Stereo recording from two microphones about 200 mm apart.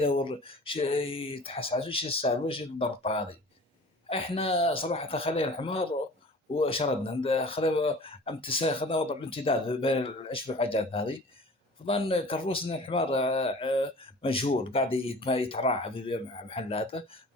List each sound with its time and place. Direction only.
0.0 s a man's voice: 25° left (ahead or behind)